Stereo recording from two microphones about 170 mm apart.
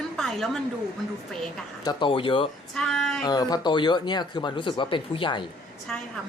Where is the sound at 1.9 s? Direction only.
30° left (ahead or behind).